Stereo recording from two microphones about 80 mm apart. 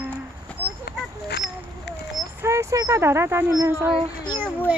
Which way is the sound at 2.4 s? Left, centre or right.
Right.